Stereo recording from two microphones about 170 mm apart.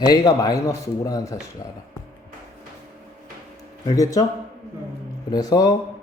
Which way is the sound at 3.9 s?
20° left (ahead or behind).